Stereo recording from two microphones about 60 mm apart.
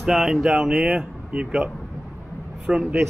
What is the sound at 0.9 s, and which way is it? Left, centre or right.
Speech, centre.